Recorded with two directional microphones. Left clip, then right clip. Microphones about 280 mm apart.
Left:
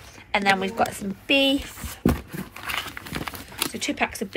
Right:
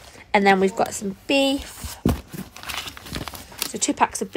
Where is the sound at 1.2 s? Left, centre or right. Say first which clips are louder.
Even; right.